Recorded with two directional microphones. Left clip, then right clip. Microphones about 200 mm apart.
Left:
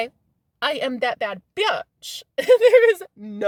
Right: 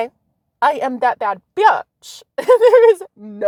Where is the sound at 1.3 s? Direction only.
15° right (ahead or behind).